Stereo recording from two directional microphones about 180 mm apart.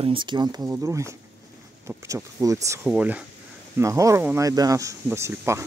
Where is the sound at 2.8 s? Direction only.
5° right (ahead or behind).